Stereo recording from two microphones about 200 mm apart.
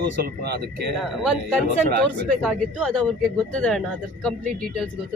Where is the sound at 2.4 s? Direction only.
5° left (ahead or behind).